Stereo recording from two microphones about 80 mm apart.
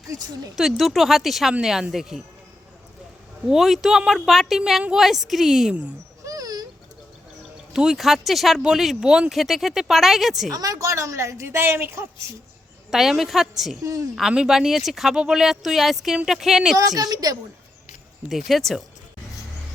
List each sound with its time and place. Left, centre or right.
0.5 s speech: centre
3.4 s speech: centre
6.2 s dog: right
7.7 s speech: centre
10.5 s a woman's voice: right
12.9 s speech: centre
16.7 s a woman's voice: right
18.3 s speech: centre